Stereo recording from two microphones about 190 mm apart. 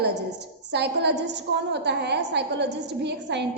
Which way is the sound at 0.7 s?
65° right (ahead or behind).